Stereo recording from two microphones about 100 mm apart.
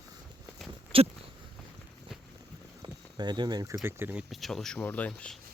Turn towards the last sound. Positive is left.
turn(degrees=10)  # may be behind; listen again after turning